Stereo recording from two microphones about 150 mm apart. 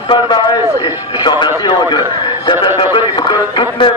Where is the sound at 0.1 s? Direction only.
30° left (ahead or behind).